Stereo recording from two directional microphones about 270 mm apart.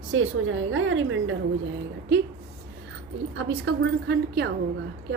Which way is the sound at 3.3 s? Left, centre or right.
Right.